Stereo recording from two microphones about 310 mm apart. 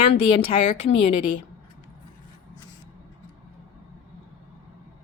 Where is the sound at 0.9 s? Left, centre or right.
Centre.